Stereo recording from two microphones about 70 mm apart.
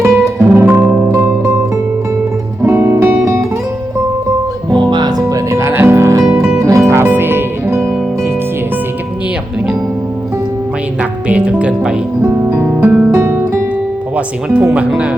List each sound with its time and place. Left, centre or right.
0.2 s music: right
0.7 s music: right
1.0 s music: right
2.6 s music: right
4.7 s music: right
5.5 s music: right
7.0 s music: right
11.3 s music: centre
12.2 s music: right
13.1 s music: right
14.5 s speech: centre